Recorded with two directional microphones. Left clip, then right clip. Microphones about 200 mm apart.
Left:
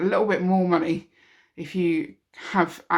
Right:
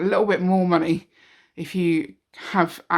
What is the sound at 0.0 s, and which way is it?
Speech, 35° right (ahead or behind).